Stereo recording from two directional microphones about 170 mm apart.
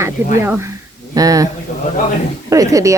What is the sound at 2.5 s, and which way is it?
Speech, 20° right (ahead or behind).